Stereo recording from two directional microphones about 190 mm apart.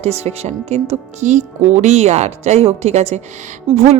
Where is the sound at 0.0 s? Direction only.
35° right (ahead or behind).